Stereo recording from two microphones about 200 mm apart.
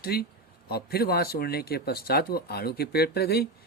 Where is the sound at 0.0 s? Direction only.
50° left (ahead or behind).